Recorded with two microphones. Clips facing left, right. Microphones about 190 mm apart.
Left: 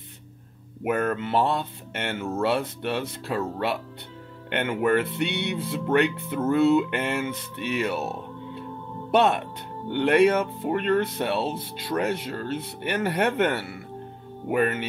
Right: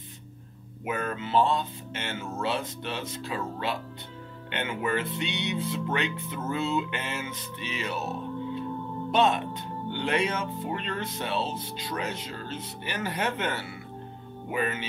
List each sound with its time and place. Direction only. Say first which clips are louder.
0.8 s speech: left 7 dB; 60° left (ahead or behind)
9.1 s speech: left 3 dB; 65° left (ahead or behind)